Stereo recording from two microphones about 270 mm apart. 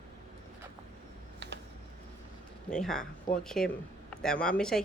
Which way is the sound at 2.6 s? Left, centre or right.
Centre.